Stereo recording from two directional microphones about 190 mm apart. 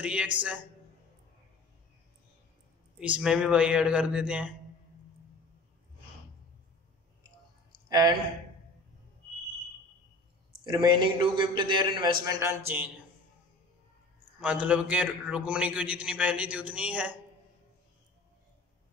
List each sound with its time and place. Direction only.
0.0 s a man's voice: 5° right (ahead or behind)
3.0 s a man's voice: 5° right (ahead or behind)
10.6 s a man's voice: 25° right (ahead or behind)
14.4 s a man's voice: 5° right (ahead or behind)